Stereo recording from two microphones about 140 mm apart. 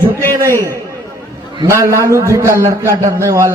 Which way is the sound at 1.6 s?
20° right (ahead or behind).